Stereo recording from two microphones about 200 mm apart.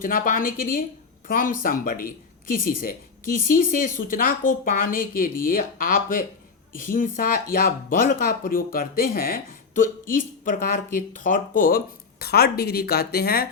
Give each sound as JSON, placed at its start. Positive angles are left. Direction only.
{"t": 0.0, "sound": "speech", "side_deg": 45}